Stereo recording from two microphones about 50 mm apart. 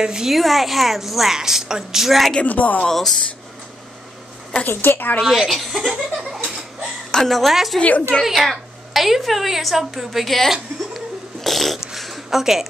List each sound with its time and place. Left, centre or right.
0.0 s a woman's voice: centre
0.4 s a woman's voice: centre
2.4 s a woman's voice: left
2.9 s speech: centre
4.6 s a woman's voice: left
5.2 s a woman's voice: centre
11.4 s fart: centre